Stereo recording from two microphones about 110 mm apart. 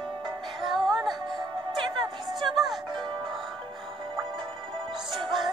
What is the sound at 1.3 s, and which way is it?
Music, 45° right (ahead or behind).